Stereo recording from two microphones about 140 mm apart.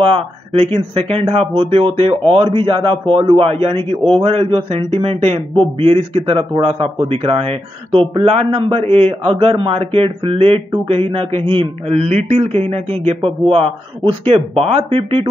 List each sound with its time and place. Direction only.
0.0 s a man's voice: 40° right (ahead or behind)